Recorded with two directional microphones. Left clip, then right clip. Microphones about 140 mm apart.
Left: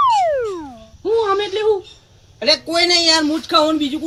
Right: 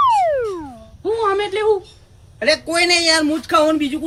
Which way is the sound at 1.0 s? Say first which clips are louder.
Left 1 dB; 35° right (ahead or behind).